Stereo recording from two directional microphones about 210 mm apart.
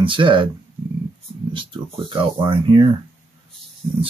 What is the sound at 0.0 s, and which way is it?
Speech, 25° right (ahead or behind).